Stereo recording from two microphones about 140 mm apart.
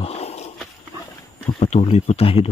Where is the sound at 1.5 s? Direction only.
50° left (ahead or behind).